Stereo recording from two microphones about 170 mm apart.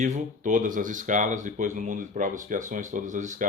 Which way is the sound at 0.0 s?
45° right (ahead or behind).